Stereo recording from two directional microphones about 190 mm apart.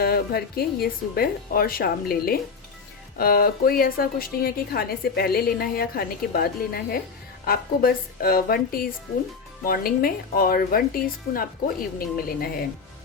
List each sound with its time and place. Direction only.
0.0 s a woman's voice: 55° left (ahead or behind)